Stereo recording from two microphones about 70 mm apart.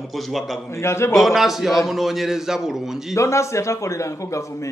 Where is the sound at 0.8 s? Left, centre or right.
Left.